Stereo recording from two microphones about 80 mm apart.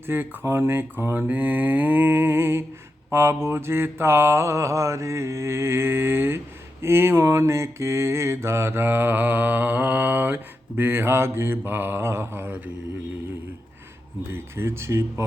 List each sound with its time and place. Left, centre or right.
0.1 s mantra: right
14.3 s mantra: right